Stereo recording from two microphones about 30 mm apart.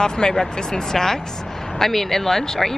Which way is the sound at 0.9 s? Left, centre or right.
Centre.